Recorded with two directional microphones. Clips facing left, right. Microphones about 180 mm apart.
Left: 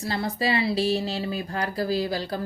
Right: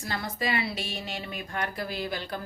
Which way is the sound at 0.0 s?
30° left (ahead or behind).